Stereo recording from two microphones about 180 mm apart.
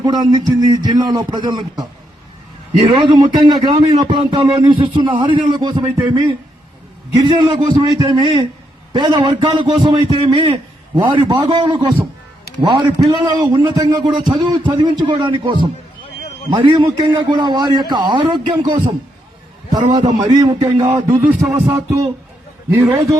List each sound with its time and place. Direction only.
0.0 s a man's voice: 20° right (ahead or behind)
3.1 s a man's voice: 25° right (ahead or behind)
7.3 s a man's voice: 25° right (ahead or behind)
21.5 s music: 15° right (ahead or behind)